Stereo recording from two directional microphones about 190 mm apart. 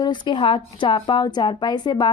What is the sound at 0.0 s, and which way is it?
Speech, 25° left (ahead or behind).